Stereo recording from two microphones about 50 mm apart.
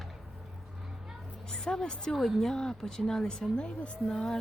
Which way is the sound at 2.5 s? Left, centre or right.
Centre.